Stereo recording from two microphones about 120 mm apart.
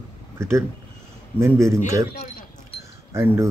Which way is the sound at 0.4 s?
20° right (ahead or behind).